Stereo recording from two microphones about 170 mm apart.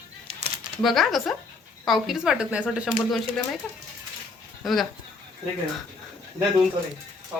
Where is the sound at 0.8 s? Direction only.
Centre (ahead or behind).